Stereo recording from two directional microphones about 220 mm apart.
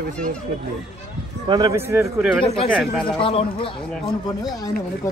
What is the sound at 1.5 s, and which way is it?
A man's voice, 15° right (ahead or behind).